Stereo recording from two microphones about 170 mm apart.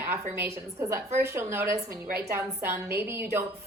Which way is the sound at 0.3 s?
15° right (ahead or behind).